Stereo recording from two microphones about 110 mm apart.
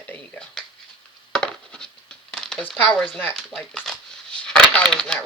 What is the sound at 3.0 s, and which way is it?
Speech, 10° left (ahead or behind).